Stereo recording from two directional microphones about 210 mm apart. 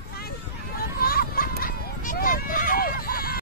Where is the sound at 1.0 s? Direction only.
45° left (ahead or behind).